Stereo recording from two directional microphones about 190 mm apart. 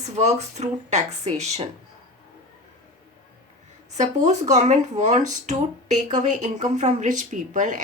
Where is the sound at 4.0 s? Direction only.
40° right (ahead or behind).